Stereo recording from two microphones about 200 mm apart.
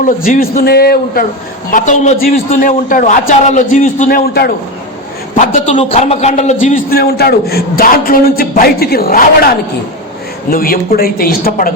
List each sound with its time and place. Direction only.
0.0 s a man's voice: 45° left (ahead or behind)
1.7 s a man's voice: 40° left (ahead or behind)
5.3 s a man's voice: 35° left (ahead or behind)
6.9 s a man's voice: 50° left (ahead or behind)